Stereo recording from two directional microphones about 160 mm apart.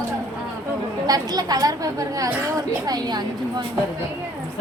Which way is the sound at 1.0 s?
25° right (ahead or behind).